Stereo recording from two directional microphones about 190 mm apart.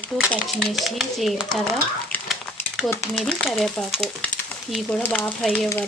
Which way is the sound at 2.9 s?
5° left (ahead or behind).